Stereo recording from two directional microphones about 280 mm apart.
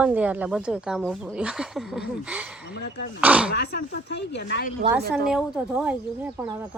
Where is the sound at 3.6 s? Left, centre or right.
Left.